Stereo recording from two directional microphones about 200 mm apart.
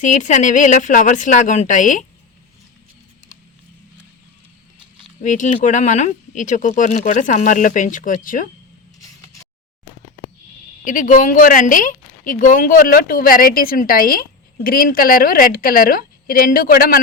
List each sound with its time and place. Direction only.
0.0 s speech: 40° left (ahead or behind)
5.2 s speech: 40° left (ahead or behind)
10.8 s speech: 40° left (ahead or behind)